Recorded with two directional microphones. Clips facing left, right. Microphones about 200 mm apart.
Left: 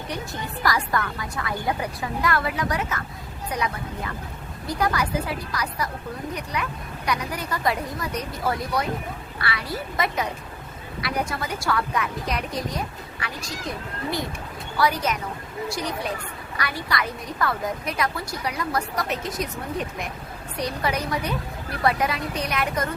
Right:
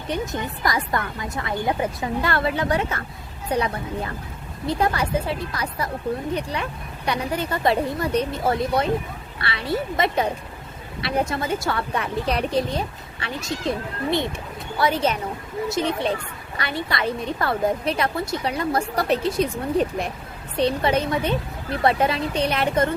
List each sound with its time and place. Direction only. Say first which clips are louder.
0.1 s a woman's voice: right 8 dB; 20° right (ahead or behind)